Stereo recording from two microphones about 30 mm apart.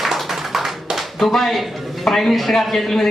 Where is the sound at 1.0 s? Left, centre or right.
Centre.